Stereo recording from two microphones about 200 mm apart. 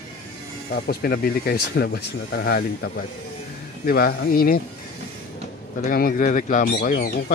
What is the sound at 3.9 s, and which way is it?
Speech, 50° left (ahead or behind).